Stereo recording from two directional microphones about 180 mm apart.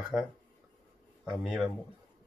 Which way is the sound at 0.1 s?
20° left (ahead or behind).